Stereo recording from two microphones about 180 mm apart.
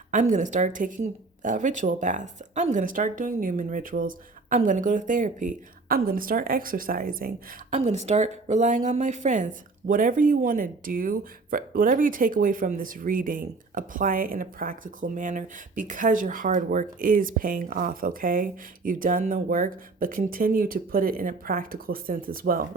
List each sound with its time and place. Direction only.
0.1 s a woman's voice: 45° right (ahead or behind)
7.8 s a woman's voice: 40° right (ahead or behind)